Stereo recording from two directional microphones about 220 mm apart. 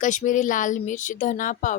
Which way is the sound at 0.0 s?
35° left (ahead or behind).